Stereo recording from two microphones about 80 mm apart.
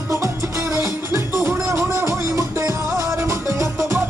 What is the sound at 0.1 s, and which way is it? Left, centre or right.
Music, right.